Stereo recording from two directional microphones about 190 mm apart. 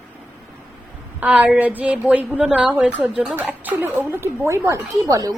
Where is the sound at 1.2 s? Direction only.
5° right (ahead or behind).